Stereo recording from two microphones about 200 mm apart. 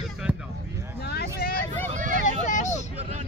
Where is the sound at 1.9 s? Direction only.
40° right (ahead or behind).